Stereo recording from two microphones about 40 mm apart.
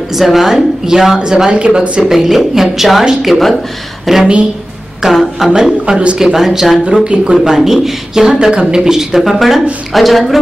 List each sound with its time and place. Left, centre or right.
0.1 s speech: centre; by 2.0 s right
2.0 s a woman's voice: centre
5.9 s speech: right
6.1 s speech: centre
7.1 s speech: right
7.4 s speech: centre